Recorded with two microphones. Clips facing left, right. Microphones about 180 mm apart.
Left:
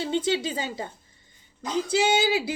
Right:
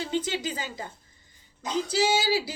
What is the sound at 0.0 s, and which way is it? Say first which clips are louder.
Speech: left 4 dB; 25° left (ahead or behind).